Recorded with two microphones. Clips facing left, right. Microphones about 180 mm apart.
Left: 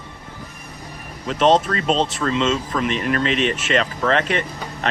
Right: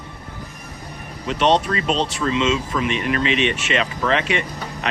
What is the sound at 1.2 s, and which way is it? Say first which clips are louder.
Speech: left 2 dB; 45° left (ahead or behind).